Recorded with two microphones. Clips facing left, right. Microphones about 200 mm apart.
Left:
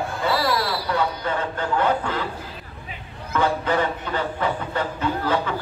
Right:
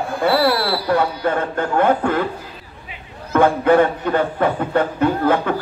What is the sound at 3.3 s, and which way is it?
Speech, 55° right (ahead or behind).